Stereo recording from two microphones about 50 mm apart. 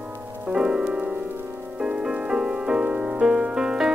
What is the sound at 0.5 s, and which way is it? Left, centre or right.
Music, centre.